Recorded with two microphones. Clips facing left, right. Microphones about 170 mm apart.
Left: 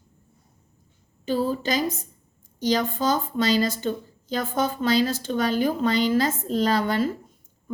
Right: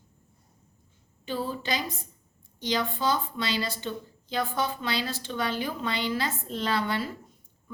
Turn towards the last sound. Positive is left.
turn(degrees=45)  # may be behind; listen again after turning